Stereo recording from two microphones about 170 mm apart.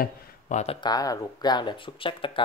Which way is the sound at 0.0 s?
45° left (ahead or behind).